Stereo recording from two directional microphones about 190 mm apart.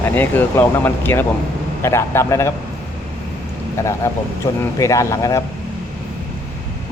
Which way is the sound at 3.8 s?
15° left (ahead or behind).